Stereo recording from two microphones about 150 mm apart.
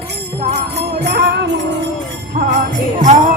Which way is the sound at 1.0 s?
90° right.